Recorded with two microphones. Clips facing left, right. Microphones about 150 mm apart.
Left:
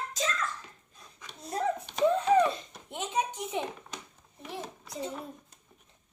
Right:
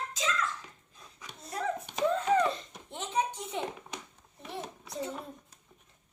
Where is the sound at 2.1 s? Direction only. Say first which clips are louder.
Left 3 dB; 15° left (ahead or behind).